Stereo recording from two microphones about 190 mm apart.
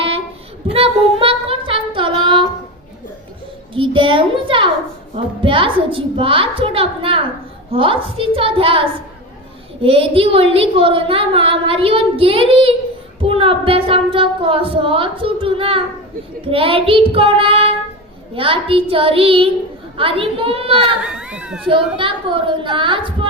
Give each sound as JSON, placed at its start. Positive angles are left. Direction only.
{"t": 0.7, "sound": "child singing", "side_deg": -30}
{"t": 3.8, "sound": "a child's voice", "side_deg": -25}
{"t": 21.0, "sound": "speech", "side_deg": -5}
{"t": 21.7, "sound": "a woman's voice", "side_deg": -25}